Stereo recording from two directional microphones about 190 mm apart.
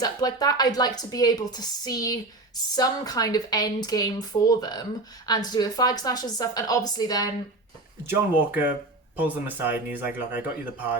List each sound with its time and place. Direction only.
0.0 s a woman's voice: 20° left (ahead or behind)
8.0 s speech: 10° right (ahead or behind)